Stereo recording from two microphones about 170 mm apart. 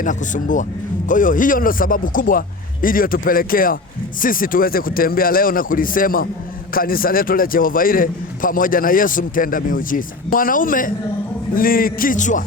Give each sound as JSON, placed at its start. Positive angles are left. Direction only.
{"t": 0.0, "sound": "a man's voice", "side_deg": 50}